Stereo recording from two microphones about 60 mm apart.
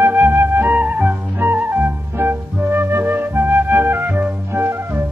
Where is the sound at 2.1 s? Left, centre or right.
Right.